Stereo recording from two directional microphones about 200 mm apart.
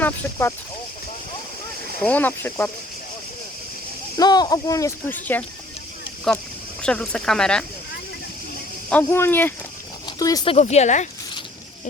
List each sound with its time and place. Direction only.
0.0 s speech: 15° left (ahead or behind)
2.0 s speech: 10° left (ahead or behind)
4.2 s speech: 20° left (ahead or behind)
6.8 s speech: 5° left (ahead or behind)
8.9 s speech: 10° left (ahead or behind); by 11.1 s 35° left (ahead or behind)